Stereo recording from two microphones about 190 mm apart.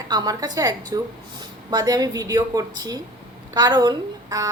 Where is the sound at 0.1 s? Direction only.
20° right (ahead or behind).